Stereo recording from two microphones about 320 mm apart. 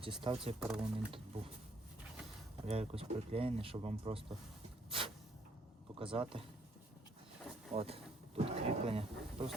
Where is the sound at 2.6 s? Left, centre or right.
Centre.